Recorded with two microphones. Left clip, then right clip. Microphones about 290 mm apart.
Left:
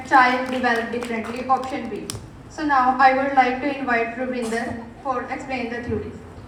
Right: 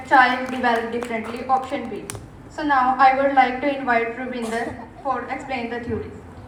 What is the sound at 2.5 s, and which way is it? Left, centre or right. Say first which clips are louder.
A woman's voice: even; centre.